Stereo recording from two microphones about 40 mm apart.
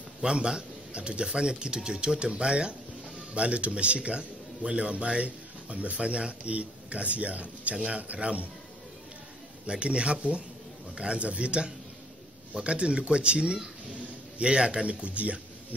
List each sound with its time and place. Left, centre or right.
0.2 s speech: centre
9.7 s speech: right